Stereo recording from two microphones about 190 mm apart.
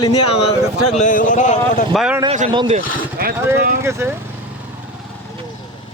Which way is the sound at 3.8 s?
15° right (ahead or behind).